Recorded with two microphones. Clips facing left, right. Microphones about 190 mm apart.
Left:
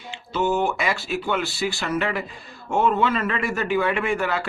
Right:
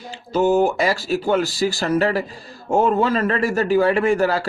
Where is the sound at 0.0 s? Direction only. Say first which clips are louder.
Right 6 dB; 40° right (ahead or behind).